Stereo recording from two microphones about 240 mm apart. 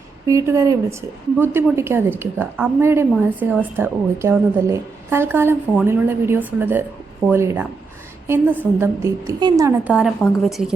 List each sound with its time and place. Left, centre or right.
0.3 s a woman's voice: centre
8.8 s a woman's voice: centre